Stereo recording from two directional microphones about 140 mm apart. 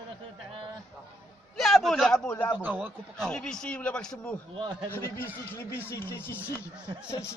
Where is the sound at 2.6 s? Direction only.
15° right (ahead or behind).